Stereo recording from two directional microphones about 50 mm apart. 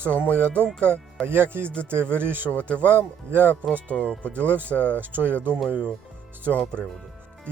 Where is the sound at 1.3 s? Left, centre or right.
Right.